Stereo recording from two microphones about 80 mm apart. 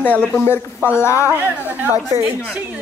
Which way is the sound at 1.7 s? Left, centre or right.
Right.